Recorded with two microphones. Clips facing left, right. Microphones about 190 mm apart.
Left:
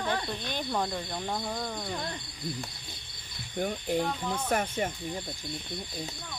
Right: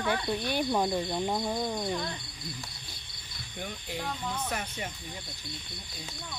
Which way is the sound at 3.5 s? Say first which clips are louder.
Left 9 dB; 50° left (ahead or behind).